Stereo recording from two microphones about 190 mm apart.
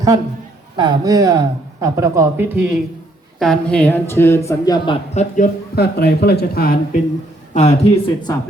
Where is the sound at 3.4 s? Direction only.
5° left (ahead or behind); by 4.9 s 20° left (ahead or behind).